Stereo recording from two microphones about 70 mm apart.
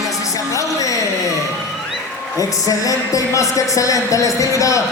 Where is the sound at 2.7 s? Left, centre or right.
Left.